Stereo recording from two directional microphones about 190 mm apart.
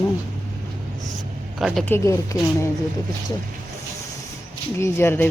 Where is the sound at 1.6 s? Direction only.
Centre (ahead or behind).